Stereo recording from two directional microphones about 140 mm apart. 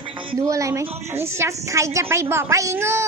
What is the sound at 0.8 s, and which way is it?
Speech, 50° right (ahead or behind).